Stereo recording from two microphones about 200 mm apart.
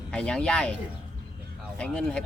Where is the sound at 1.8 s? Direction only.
5° left (ahead or behind).